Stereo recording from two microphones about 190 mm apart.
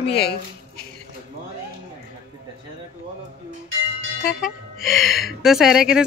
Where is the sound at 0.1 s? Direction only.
60° left (ahead or behind).